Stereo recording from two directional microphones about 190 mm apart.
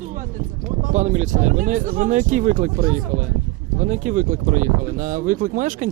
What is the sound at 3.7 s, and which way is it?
Speech, 40° right (ahead or behind).